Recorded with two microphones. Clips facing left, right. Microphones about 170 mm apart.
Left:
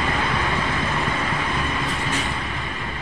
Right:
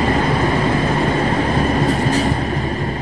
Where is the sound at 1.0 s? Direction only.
35° right (ahead or behind).